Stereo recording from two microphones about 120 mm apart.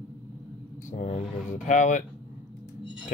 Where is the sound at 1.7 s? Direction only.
90° left.